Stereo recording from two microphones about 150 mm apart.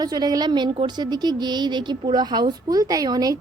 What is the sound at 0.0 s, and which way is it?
A woman's voice, 25° right (ahead or behind).